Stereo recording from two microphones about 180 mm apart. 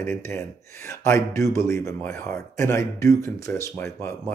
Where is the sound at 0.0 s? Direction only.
15° left (ahead or behind).